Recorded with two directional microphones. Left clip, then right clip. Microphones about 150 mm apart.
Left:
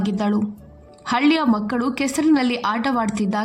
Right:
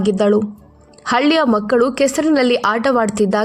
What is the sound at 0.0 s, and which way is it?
A woman's voice, 35° right (ahead or behind).